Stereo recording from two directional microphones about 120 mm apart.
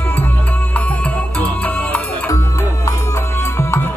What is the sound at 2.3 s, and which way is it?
Music, 25° left (ahead or behind).